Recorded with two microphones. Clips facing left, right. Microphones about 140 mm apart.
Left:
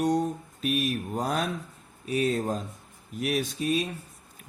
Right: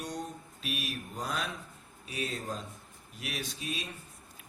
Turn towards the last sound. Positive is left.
turn(degrees=45)  # may be behind; listen again after turning